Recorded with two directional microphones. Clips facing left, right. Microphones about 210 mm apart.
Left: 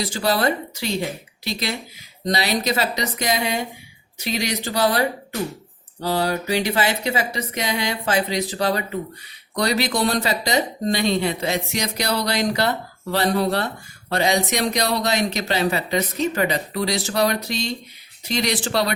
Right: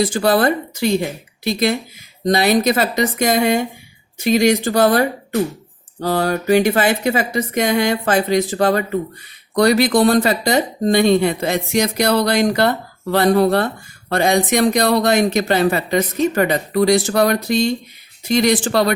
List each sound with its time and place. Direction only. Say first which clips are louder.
0.0 s speech: right 6 dB; 50° right (ahead or behind)